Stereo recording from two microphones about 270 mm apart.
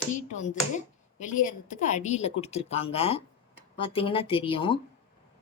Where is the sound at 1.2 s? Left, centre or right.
Left.